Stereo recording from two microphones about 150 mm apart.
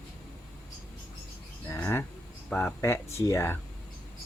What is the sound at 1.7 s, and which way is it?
Speech, 15° left (ahead or behind).